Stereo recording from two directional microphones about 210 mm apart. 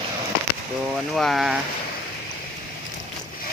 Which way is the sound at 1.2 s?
Centre (ahead or behind).